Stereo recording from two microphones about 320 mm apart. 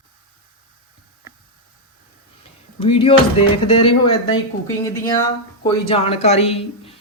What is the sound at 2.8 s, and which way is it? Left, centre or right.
Speech, centre.